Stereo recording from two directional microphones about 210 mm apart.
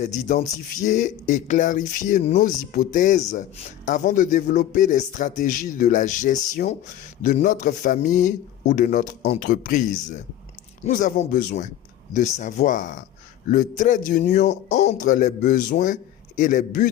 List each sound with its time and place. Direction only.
0.0 s speech: 35° left (ahead or behind)